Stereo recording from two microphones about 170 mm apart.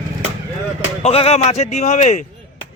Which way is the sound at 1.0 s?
35° left (ahead or behind).